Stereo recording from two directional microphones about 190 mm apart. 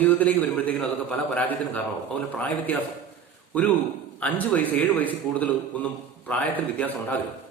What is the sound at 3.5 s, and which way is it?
Speech, 10° left (ahead or behind).